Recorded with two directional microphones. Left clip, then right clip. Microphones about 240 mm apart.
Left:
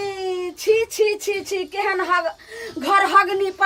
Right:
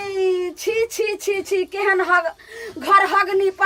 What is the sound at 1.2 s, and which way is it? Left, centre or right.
A woman's voice, centre.